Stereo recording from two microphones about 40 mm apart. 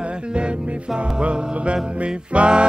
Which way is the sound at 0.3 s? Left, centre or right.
Right.